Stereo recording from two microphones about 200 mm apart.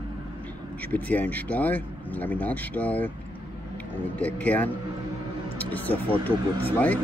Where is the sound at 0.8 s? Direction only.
10° left (ahead or behind).